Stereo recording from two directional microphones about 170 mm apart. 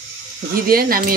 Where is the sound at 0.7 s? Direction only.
60° right (ahead or behind).